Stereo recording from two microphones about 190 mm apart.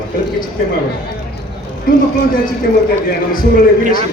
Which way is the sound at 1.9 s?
50° left (ahead or behind).